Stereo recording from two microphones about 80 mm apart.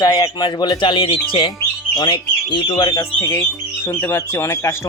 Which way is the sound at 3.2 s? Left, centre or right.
Left.